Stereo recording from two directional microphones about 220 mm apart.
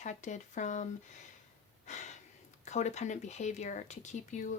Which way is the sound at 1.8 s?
30° left (ahead or behind).